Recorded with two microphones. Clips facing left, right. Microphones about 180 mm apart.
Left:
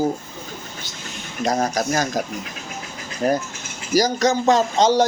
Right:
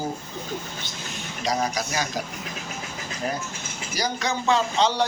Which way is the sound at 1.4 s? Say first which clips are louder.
Left 5 dB; 50° left (ahead or behind).